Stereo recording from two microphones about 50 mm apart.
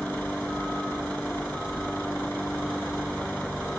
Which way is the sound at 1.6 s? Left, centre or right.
Centre.